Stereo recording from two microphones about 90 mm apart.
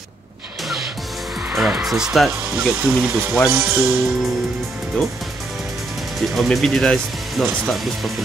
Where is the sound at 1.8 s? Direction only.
5° right (ahead or behind).